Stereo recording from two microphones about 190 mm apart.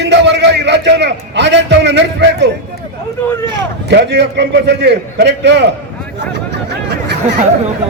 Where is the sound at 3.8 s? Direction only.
65° right (ahead or behind).